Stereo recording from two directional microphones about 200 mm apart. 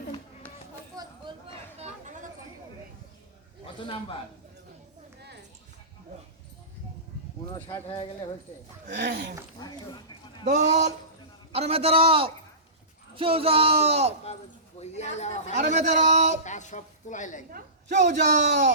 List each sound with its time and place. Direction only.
0.9 s a sound: 20° right (ahead or behind)
7.5 s speech: 25° left (ahead or behind)
8.9 s speech: 60° right (ahead or behind)
9.6 s a sound: 20° left (ahead or behind)
10.4 s speech: 35° right (ahead or behind)
14.8 s a woman's voice: 35° left (ahead or behind)
15.5 s speech: 40° right (ahead or behind)
16.4 s a woman's voice: 35° left (ahead or behind)
17.5 s speech: 35° right (ahead or behind)
18.3 s speech: 60° right (ahead or behind)